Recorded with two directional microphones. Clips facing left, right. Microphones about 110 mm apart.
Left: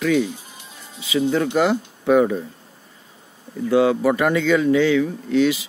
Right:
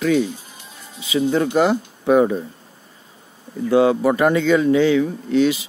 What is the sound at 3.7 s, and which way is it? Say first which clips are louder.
Speech: right 1 dB; 30° right (ahead or behind).